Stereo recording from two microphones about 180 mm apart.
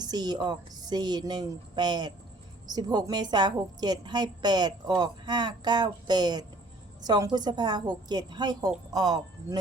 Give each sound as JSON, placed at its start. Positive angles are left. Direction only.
{"t": 0.0, "sound": "a woman's voice", "side_deg": -20}